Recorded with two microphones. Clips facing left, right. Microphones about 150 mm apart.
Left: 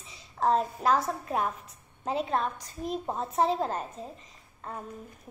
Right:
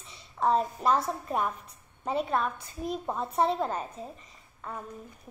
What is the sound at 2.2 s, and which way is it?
Child singing, 30° left (ahead or behind).